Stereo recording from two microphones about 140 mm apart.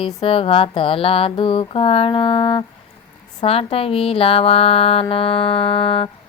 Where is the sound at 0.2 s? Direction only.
40° left (ahead or behind).